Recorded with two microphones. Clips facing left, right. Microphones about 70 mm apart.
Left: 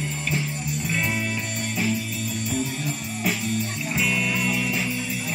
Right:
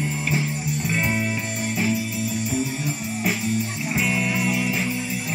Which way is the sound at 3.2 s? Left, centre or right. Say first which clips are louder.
Right 2 dB; centre.